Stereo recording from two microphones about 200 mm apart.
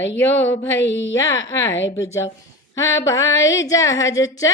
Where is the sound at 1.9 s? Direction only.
15° left (ahead or behind).